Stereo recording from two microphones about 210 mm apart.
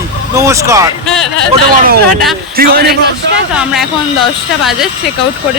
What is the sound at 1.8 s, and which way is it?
A man's voice, 45° right (ahead or behind).